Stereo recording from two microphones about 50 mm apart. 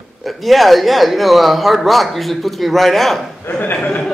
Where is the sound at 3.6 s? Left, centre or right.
Left.